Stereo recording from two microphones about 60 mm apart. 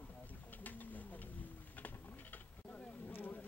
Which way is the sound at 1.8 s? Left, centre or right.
Left.